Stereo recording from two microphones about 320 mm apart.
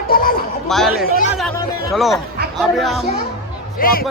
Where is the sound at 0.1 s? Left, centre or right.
Left.